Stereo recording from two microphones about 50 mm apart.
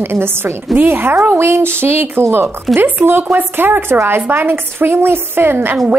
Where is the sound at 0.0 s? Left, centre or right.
Right.